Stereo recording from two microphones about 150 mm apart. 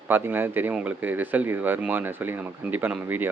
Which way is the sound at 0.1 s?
15° right (ahead or behind).